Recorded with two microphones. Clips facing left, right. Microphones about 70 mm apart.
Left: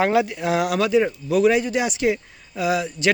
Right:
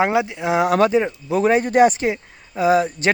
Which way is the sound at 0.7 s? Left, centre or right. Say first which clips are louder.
Right 3 dB; right.